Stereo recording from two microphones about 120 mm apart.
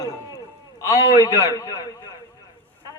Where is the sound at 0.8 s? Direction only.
30° left (ahead or behind).